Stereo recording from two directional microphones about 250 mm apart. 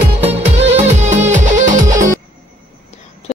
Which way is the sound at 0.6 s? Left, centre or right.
Right.